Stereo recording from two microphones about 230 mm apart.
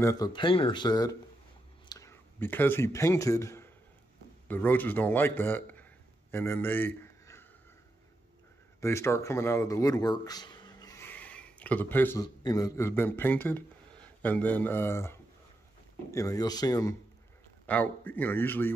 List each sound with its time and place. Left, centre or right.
0.0 s a man's voice: centre
8.8 s a man's voice: centre